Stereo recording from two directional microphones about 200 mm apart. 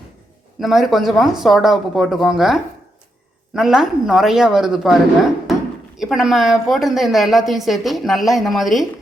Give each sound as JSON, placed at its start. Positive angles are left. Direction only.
{"t": 0.6, "sound": "a woman's voice", "side_deg": 0}
{"t": 6.0, "sound": "a woman's voice", "side_deg": 0}